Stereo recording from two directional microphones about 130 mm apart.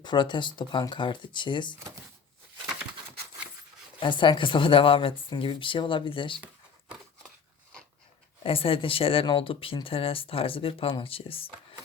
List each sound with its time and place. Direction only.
0.0 s speech: 35° left (ahead or behind)
4.0 s speech: 40° left (ahead or behind)
8.4 s speech: 45° left (ahead or behind)